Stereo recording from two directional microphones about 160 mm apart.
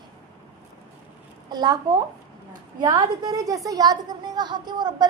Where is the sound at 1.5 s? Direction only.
25° right (ahead or behind).